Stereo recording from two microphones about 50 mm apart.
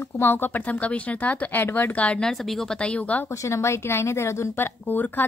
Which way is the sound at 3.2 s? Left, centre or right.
Left.